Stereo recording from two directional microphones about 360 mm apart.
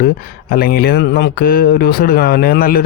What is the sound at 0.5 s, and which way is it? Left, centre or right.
Speech, left.